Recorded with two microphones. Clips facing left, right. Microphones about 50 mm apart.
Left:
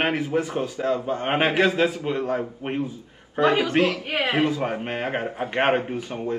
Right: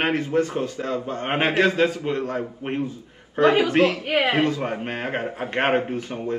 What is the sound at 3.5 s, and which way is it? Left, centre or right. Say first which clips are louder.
Speech: right 3 dB; centre.